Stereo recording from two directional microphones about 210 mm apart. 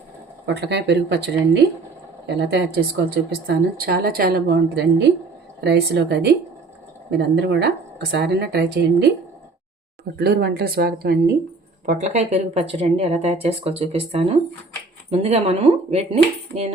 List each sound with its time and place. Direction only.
0.4 s a woman's voice: 55° right (ahead or behind)
10.2 s a woman's voice: 50° right (ahead or behind)
11.9 s speech: 35° right (ahead or behind)